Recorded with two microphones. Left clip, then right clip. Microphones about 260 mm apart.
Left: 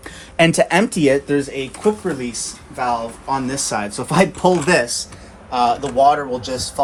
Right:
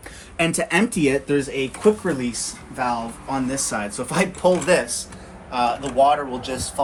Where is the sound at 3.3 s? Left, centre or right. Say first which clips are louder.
Left 3 dB; left.